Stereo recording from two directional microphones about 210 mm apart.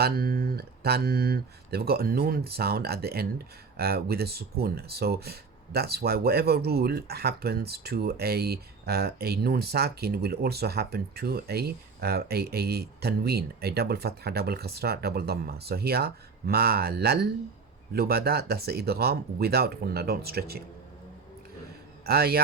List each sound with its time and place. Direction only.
0.0 s speech: 45° right (ahead or behind)
22.0 s a man's voice: 45° right (ahead or behind)